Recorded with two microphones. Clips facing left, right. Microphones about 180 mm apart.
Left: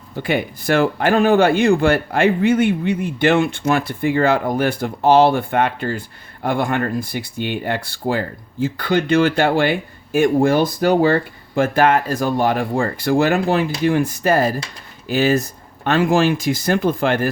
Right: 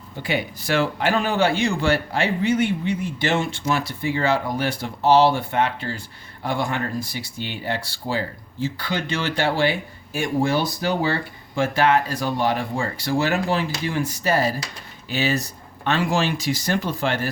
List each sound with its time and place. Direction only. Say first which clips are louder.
0.2 s a man's voice: left 5 dB; 55° left (ahead or behind)